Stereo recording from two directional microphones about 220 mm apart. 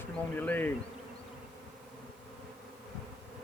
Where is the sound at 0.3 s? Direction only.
10° left (ahead or behind).